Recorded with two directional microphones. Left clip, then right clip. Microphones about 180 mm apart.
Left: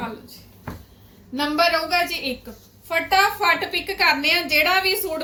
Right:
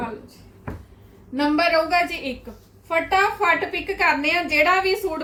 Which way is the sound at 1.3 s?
20° right (ahead or behind).